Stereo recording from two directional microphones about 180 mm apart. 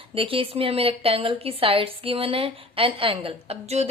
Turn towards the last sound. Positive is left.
turn(degrees=-35)  # may be behind; listen again after turning